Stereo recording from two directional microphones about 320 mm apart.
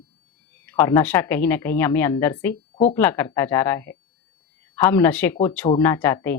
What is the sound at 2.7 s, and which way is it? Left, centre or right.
A woman's voice, centre.